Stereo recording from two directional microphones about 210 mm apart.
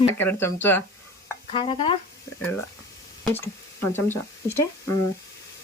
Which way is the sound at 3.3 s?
10° left (ahead or behind).